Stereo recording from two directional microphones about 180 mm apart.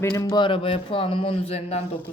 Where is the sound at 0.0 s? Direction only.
20° left (ahead or behind); by 2.0 s 35° left (ahead or behind).